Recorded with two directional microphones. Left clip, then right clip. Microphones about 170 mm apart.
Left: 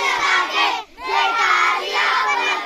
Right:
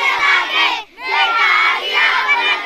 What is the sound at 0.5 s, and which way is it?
Child singing, centre (ahead or behind).